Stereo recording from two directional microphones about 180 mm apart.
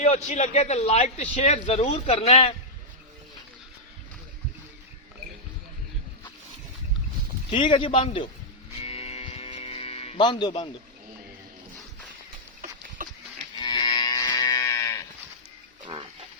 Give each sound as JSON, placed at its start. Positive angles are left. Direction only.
{"t": 0.0, "sound": "a man's voice", "side_deg": 40}
{"t": 7.5, "sound": "a man's voice", "side_deg": 25}
{"t": 8.8, "sound": "a sound", "side_deg": 35}
{"t": 13.0, "sound": "livestock", "side_deg": -50}
{"t": 13.6, "sound": "moo", "side_deg": 25}